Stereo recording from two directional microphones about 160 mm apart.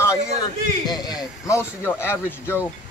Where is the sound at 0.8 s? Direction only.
25° left (ahead or behind).